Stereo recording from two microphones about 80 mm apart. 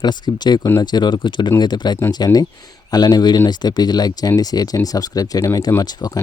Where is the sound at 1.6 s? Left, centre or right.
Left.